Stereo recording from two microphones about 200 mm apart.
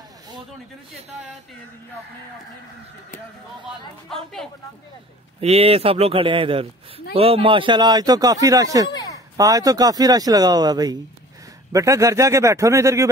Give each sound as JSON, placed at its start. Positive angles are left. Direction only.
{"t": 4.1, "sound": "speech", "side_deg": 0}
{"t": 5.4, "sound": "speech", "side_deg": -30}
{"t": 8.9, "sound": "a sound", "side_deg": 15}
{"t": 9.4, "sound": "speech", "side_deg": -15}